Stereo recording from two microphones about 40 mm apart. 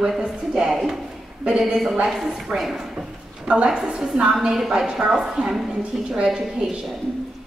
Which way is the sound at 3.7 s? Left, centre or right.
Right.